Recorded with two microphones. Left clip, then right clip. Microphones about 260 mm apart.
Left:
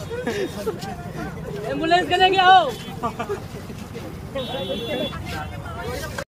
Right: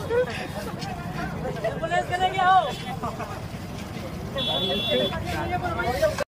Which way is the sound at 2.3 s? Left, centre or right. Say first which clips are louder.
Left 5 dB; left.